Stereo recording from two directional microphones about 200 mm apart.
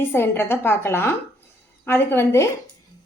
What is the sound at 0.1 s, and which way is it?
A woman's voice, 10° left (ahead or behind).